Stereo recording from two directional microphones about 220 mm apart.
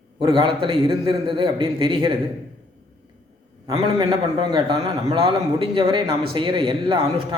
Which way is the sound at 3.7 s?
20° right (ahead or behind).